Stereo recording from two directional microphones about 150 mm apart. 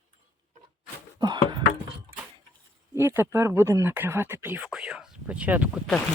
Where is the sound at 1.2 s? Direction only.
30° right (ahead or behind).